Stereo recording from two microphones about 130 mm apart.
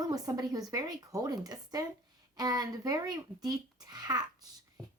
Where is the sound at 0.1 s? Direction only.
30° right (ahead or behind).